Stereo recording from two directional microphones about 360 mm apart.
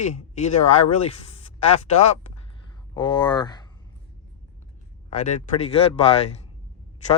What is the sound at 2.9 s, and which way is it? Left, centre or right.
Speech, centre.